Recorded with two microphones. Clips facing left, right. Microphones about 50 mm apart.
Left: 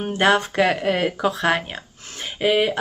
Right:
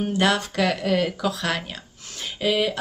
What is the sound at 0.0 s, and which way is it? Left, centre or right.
Speech, left.